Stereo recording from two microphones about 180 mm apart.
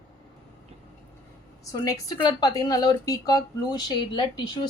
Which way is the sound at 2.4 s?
20° left (ahead or behind).